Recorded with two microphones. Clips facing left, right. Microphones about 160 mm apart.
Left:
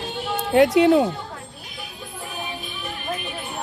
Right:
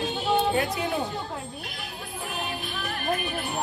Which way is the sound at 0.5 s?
85° left.